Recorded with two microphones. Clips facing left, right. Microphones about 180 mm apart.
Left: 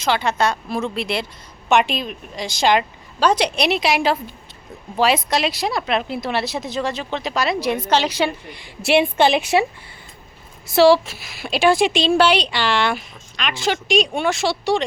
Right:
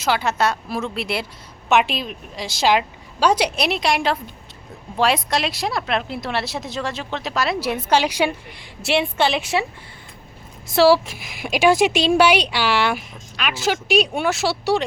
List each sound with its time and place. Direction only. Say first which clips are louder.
0.0 s speech: left 1 dB; 5° right (ahead or behind)
8.9 s a woman's voice: left 4 dB; 15° left (ahead or behind)
10.8 s speech: left 2 dB; 5° right (ahead or behind)